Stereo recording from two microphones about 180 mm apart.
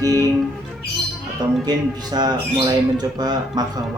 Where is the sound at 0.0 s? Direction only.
20° right (ahead or behind).